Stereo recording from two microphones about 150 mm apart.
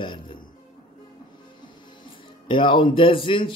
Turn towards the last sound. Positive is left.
turn(degrees=35)  # may be behind; listen again after turning